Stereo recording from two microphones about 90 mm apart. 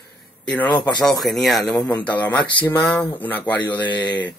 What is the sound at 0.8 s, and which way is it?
Speech, 50° left (ahead or behind).